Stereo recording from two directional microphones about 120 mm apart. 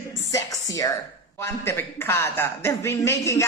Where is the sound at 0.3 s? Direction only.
30° left (ahead or behind).